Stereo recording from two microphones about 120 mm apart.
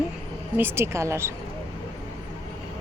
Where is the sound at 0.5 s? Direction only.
20° right (ahead or behind).